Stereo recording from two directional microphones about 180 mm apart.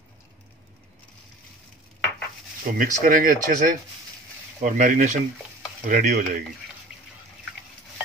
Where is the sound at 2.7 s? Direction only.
45° right (ahead or behind).